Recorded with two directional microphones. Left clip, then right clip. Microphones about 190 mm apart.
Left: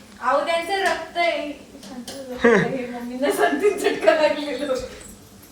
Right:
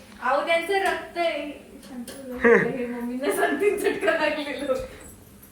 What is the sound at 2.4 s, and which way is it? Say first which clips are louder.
Speech: left 1 dB; 5° left (ahead or behind).